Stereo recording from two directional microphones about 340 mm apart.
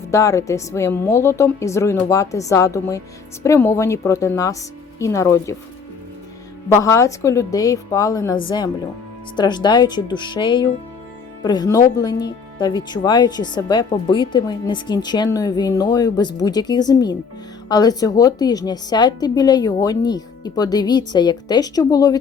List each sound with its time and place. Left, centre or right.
0.1 s speech: centre
6.7 s speech: centre